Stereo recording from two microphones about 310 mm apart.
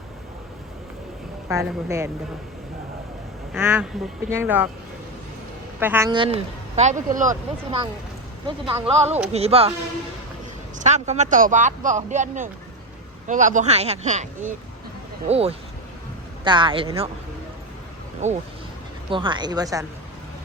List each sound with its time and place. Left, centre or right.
1.5 s speech: centre
3.5 s speech: centre
5.8 s speech: centre
10.8 s speech: right
19.1 s speech: centre